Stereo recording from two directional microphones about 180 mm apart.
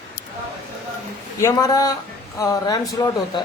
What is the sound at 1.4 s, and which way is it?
Speech, 20° left (ahead or behind).